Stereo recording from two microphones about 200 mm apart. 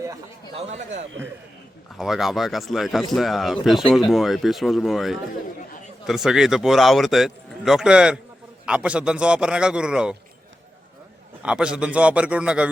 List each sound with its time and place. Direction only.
0.5 s speech: 35° right (ahead or behind)
0.9 s a man's voice: 65° right (ahead or behind)
2.0 s a man's voice: centre (ahead or behind)
11.4 s a man's voice: 5° right (ahead or behind)